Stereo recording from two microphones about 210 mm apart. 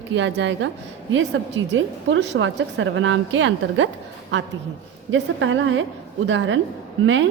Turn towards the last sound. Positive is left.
turn(degrees=-65)  # may be behind; listen again after turning